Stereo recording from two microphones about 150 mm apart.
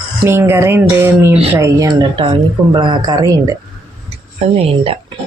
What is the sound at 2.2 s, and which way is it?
A woman's voice, 35° right (ahead or behind).